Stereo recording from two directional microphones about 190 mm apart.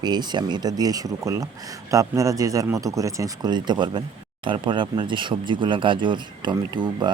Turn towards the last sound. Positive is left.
turn(degrees=-25)  # may be behind; listen again after turning